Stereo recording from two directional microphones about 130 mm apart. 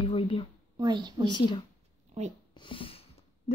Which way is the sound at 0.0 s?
40° left (ahead or behind).